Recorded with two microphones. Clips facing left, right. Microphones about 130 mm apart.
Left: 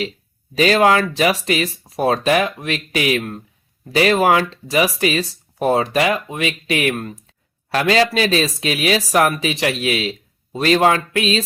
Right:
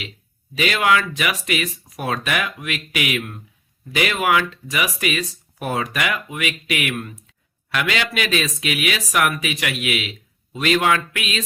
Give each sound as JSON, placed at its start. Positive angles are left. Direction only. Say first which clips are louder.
{"t": 0.5, "sound": "speech", "louder": "left 5 dB", "side_deg": 35}